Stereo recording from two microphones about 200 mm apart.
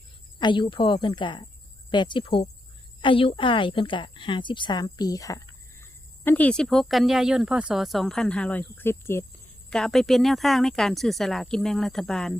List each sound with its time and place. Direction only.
0.3 s a woman's voice: 25° left (ahead or behind); by 12.4 s centre (ahead or behind)